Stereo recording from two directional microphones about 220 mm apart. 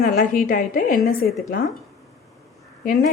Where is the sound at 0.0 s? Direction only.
40° left (ahead or behind).